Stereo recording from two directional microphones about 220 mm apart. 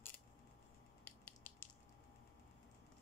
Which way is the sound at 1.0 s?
10° left (ahead or behind).